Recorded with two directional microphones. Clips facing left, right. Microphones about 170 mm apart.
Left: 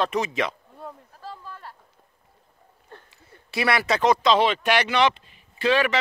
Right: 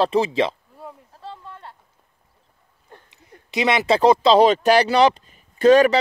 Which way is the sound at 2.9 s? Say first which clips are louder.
Right 1 dB; 15° right (ahead or behind).